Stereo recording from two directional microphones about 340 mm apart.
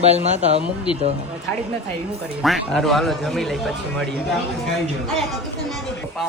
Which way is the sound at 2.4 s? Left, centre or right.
Centre.